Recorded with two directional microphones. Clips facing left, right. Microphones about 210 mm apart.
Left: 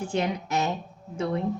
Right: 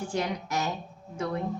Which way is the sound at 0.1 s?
25° left (ahead or behind).